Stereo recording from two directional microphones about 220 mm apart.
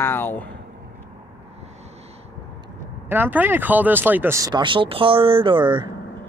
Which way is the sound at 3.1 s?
10° right (ahead or behind).